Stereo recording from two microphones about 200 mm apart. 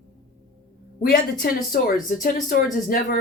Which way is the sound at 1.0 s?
45° left (ahead or behind).